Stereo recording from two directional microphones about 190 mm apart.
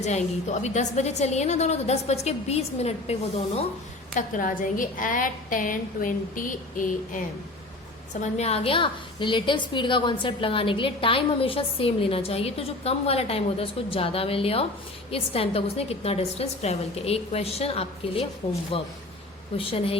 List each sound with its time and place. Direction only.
0.0 s a woman's voice: 35° left (ahead or behind)
4.1 s a woman's voice: 45° left (ahead or behind)